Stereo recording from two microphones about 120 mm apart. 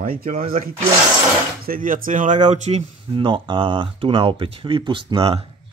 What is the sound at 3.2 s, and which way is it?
Speech, 45° right (ahead or behind).